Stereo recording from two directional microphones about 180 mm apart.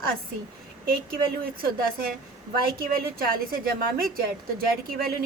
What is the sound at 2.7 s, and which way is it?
Speech, 55° right (ahead or behind).